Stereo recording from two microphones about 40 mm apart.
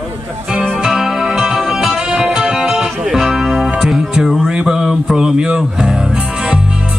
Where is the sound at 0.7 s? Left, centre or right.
Centre.